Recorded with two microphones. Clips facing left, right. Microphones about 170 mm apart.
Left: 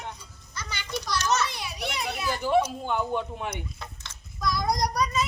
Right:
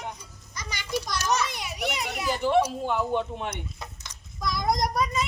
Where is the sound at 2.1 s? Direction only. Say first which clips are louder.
Right 1 dB; centre (ahead or behind).